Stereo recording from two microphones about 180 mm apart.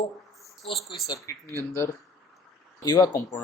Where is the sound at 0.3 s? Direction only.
Centre (ahead or behind).